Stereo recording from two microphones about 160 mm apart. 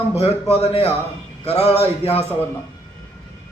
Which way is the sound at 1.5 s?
40° left (ahead or behind).